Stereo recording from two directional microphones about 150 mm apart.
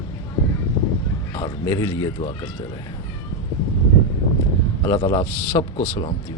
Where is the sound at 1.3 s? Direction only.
25° left (ahead or behind).